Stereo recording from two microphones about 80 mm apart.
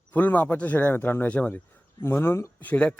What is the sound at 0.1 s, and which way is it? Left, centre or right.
Speech, left.